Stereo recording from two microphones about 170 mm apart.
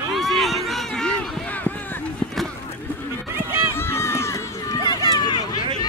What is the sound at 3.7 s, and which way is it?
Run, 15° left (ahead or behind).